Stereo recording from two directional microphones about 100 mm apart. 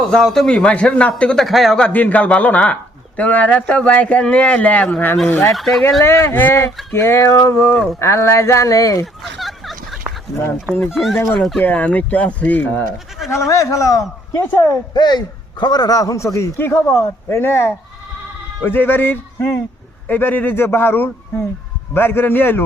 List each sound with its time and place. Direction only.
0.0 s speech: 5° left (ahead or behind)
1.9 s speech: 15° left (ahead or behind)
5.5 s speech: centre (ahead or behind)
6.0 s a man's voice: 25° left (ahead or behind)
9.4 s a sound: centre (ahead or behind)
10.7 s speech: 10° right (ahead or behind)
11.3 s speech: 5° left (ahead or behind)
11.6 s speech: 15° left (ahead or behind)
13.5 s a man's voice: 35° left (ahead or behind)
14.9 s a man's voice: 50° left (ahead or behind); by 22.6 s 20° left (ahead or behind)